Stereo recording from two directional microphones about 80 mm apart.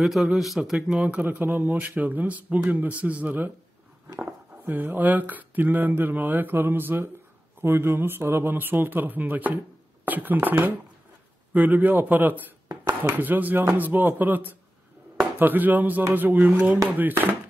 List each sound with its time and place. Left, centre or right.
0.0 s speech: centre
1.2 s speech: right